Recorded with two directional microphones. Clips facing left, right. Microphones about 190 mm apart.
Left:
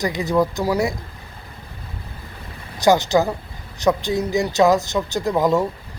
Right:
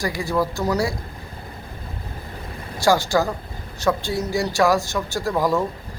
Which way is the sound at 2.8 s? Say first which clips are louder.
Left 3 dB; 20° left (ahead or behind).